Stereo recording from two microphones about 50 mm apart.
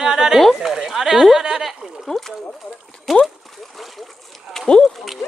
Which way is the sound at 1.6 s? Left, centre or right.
Centre.